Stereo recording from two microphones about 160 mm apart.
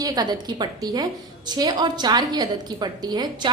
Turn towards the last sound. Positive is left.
turn(degrees=-25)  # may be behind; listen again after turning